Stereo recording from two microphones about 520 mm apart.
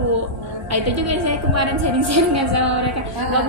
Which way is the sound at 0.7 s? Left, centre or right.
Right.